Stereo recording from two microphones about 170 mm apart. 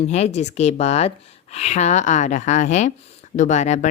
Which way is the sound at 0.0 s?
40° left (ahead or behind).